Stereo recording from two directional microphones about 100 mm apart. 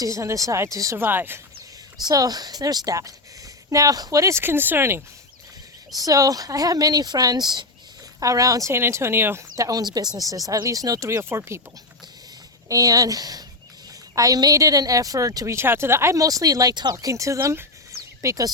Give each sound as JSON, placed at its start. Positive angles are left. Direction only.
{"t": 0.0, "sound": "speech", "side_deg": -30}
{"t": 1.0, "sound": "speech", "side_deg": -20}
{"t": 2.0, "sound": "speech", "side_deg": -40}
{"t": 6.0, "sound": "speech", "side_deg": -35}
{"t": 8.2, "sound": "speech", "side_deg": -35}
{"t": 12.6, "sound": "speech", "side_deg": -35}
{"t": 15.5, "sound": "speech", "side_deg": -25}